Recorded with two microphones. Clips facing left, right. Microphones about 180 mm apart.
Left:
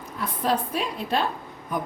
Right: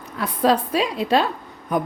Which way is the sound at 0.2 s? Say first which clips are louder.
Right 6 dB; 90° right.